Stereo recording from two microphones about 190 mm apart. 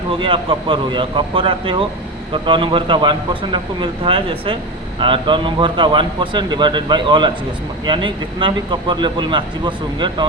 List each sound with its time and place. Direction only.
0.2 s speech: 25° right (ahead or behind)